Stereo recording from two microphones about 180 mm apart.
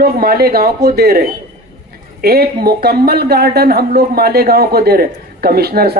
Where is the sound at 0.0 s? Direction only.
60° right (ahead or behind).